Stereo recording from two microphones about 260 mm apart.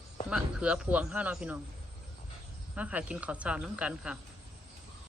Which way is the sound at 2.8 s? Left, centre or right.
Centre.